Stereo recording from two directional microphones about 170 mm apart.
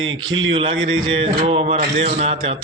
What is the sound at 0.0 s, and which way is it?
A man's voice, 30° right (ahead or behind).